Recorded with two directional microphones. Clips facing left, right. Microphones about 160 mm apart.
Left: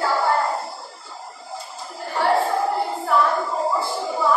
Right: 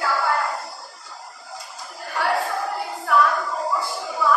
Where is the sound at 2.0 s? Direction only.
25° left (ahead or behind).